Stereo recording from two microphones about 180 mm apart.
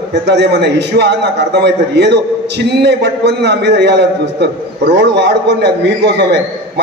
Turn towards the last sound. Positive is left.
turn(degrees=-70)  # may be behind; listen again after turning